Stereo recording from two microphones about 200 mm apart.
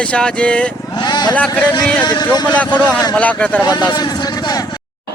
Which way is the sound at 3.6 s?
20° left (ahead or behind).